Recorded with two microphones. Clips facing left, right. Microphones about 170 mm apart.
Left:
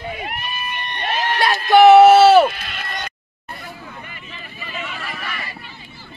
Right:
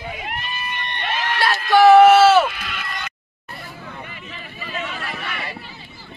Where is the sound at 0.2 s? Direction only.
15° left (ahead or behind).